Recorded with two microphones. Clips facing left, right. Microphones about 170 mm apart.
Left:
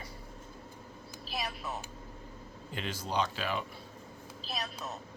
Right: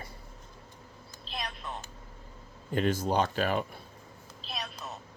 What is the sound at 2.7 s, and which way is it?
Speech, 50° right (ahead or behind).